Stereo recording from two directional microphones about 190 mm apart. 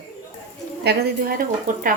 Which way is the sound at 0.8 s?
50° right (ahead or behind).